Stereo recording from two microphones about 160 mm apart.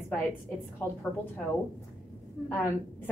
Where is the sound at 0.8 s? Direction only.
15° left (ahead or behind).